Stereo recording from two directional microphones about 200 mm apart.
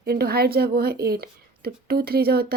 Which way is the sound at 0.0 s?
50° right (ahead or behind).